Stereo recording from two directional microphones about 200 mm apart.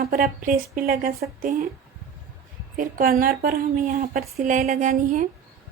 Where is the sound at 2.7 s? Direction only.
45° right (ahead or behind).